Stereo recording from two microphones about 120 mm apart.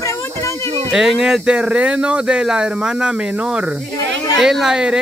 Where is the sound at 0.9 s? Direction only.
5° right (ahead or behind).